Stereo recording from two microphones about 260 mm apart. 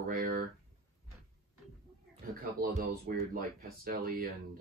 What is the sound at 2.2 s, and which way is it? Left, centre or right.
Speech, right.